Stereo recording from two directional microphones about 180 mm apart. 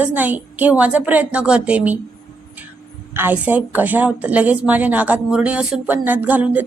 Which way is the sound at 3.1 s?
10° right (ahead or behind).